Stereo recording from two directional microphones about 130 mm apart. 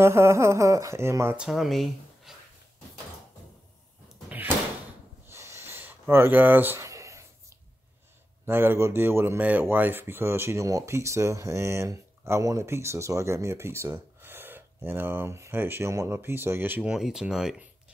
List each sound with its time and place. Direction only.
0.0 s speech: 20° right (ahead or behind)
1.3 s speech: 5° right (ahead or behind)
5.3 s a sound: 20° right (ahead or behind)
8.5 s speech: 15° right (ahead or behind)